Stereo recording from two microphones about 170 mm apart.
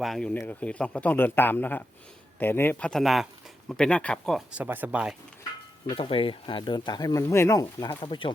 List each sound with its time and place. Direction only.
0.0 s speech: centre (ahead or behind)
6.0 s speech: 30° left (ahead or behind)